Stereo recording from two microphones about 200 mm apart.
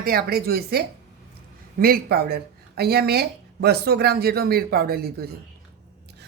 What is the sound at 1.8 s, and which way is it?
Speech, 50° right (ahead or behind).